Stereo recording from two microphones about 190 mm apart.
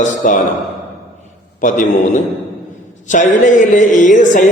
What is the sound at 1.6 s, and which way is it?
Speech, 45° left (ahead or behind).